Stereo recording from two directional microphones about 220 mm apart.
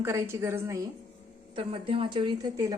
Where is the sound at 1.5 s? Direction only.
25° right (ahead or behind).